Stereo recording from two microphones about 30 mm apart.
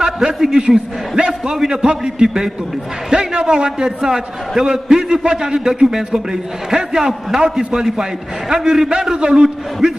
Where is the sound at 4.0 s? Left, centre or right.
Centre.